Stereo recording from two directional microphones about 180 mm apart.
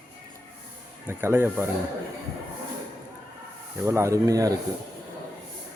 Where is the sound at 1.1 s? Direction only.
15° right (ahead or behind).